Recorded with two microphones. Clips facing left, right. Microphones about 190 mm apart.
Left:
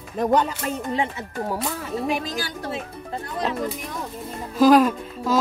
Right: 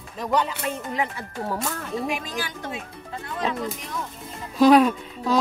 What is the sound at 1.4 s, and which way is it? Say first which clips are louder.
Speech: left 1 dB; 5° left (ahead or behind).